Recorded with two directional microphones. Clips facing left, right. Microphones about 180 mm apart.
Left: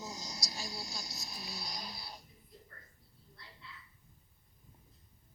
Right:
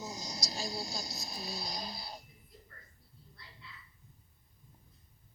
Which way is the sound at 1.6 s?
25° right (ahead or behind).